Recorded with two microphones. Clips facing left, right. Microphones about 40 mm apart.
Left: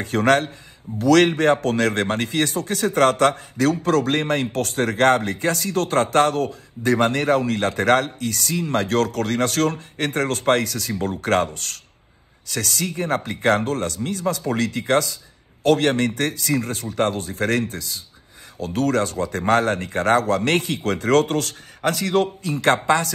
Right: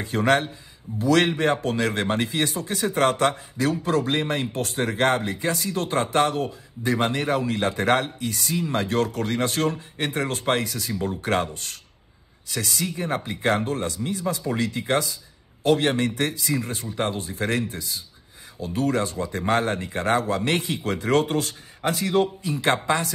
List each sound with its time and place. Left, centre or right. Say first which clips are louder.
0.0 s speech: left 3 dB; left
12.7 s speech: left 4 dB; left